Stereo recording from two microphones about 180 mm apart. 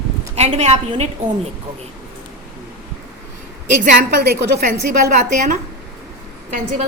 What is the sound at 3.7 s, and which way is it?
A woman's voice, 50° right (ahead or behind).